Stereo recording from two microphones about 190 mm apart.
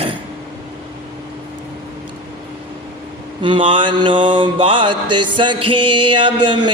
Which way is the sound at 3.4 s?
25° right (ahead or behind).